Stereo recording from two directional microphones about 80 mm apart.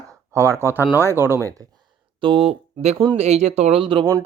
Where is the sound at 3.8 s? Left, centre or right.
Right.